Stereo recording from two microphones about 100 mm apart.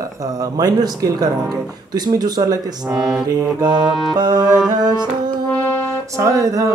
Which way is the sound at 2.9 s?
5° right (ahead or behind).